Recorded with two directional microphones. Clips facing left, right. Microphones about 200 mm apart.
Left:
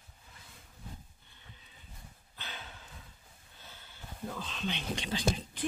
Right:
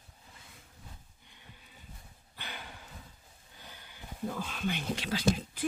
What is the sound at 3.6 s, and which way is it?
Speech, 15° right (ahead or behind).